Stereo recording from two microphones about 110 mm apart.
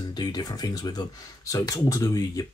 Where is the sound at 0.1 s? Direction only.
40° left (ahead or behind).